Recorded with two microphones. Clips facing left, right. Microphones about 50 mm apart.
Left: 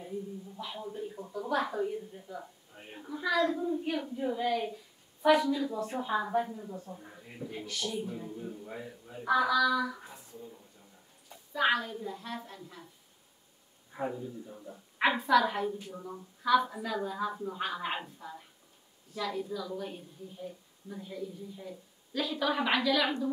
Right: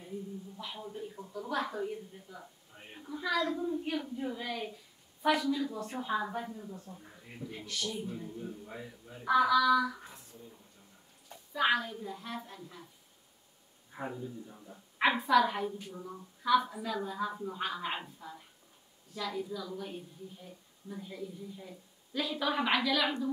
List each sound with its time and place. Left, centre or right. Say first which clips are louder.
0.6 s a man's voice: left 4 dB; centre
11.5 s speech: left 1 dB; centre
13.9 s speech: left 4 dB; centre
16.4 s speech: left 1 dB; centre
20.9 s speech: left 2 dB; centre